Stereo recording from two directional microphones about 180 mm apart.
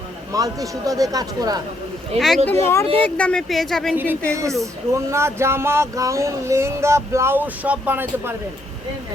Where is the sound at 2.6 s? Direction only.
15° left (ahead or behind).